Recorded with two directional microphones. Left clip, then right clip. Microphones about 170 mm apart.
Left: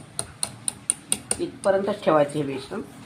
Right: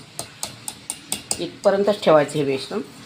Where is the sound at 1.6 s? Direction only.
75° right (ahead or behind).